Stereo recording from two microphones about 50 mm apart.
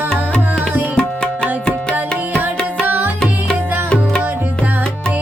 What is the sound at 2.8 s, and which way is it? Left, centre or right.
Music, right.